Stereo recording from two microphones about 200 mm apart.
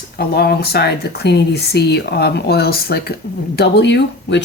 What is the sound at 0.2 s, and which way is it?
Speech, 50° left (ahead or behind).